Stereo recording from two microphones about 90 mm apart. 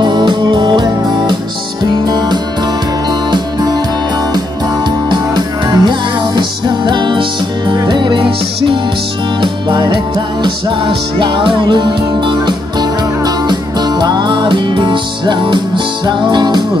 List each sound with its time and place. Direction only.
0.0 s music: 55° right (ahead or behind)
5.1 s music: 55° right (ahead or behind)